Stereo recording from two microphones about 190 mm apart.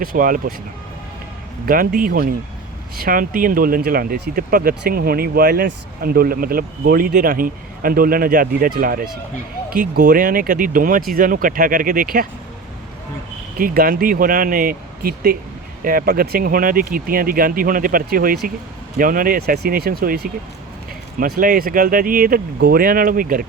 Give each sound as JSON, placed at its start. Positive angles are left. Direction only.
{"t": 0.0, "sound": "speech", "side_deg": -50}
{"t": 1.6, "sound": "speech", "side_deg": -50}
{"t": 13.6, "sound": "speech", "side_deg": -50}